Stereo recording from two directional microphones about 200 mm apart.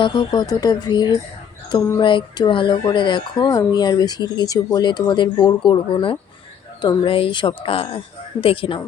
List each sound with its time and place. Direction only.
0.0 s speech: 20° left (ahead or behind)